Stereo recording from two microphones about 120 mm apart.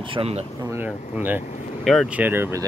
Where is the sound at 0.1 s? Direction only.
55° right (ahead or behind).